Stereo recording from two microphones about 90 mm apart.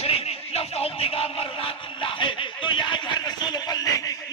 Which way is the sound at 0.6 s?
90° left.